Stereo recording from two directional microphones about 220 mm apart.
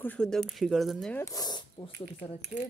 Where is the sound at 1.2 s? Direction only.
15° left (ahead or behind).